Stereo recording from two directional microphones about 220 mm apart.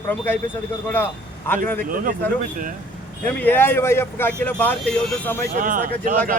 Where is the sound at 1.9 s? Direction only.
40° right (ahead or behind).